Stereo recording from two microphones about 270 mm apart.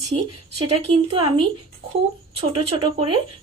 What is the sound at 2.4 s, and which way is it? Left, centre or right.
Speech, centre.